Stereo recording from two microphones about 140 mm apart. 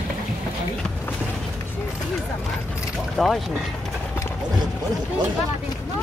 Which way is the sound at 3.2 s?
Centre (ahead or behind).